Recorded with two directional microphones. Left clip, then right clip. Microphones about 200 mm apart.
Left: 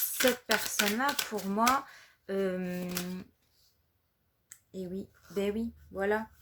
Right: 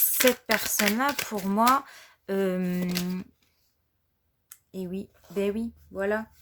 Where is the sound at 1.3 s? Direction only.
45° right (ahead or behind).